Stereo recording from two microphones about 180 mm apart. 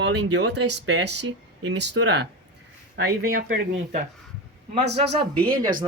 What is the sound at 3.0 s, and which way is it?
Speech, 55° right (ahead or behind).